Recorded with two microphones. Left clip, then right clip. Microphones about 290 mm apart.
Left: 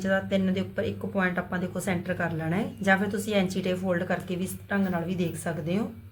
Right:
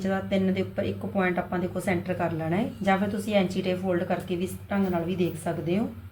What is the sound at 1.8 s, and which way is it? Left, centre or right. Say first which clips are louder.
A woman's voice: right 1 dB; left.